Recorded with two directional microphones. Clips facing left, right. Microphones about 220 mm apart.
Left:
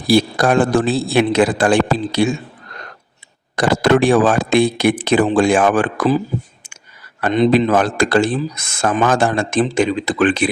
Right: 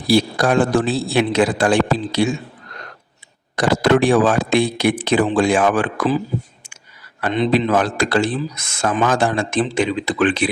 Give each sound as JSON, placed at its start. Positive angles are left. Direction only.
{"t": 0.1, "sound": "speech", "side_deg": 50}
{"t": 3.5, "sound": "speech", "side_deg": 50}
{"t": 7.2, "sound": "speech", "side_deg": 45}